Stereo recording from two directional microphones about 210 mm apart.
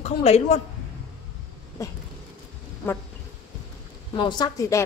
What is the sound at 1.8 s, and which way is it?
Speech, 15° left (ahead or behind).